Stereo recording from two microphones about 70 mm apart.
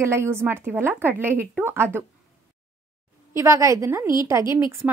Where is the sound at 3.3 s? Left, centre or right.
Right.